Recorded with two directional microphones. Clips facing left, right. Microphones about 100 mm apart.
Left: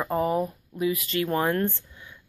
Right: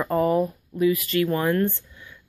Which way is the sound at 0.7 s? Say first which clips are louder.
Right 5 dB; 25° left (ahead or behind).